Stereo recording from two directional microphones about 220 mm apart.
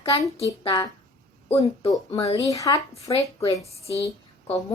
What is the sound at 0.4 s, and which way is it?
Speech, 15° left (ahead or behind).